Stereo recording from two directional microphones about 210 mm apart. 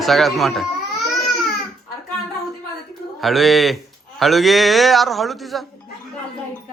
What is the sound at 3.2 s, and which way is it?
A man's voice, centre (ahead or behind).